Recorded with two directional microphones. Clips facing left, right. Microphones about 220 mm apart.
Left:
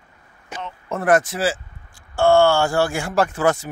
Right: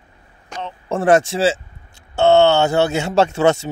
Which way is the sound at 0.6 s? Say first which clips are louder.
Right 5 dB; 30° right (ahead or behind).